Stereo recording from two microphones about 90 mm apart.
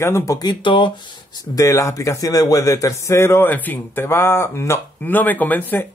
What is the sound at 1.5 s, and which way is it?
Speech, 40° left (ahead or behind).